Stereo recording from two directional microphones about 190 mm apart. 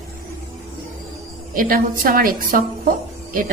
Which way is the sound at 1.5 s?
50° right (ahead or behind).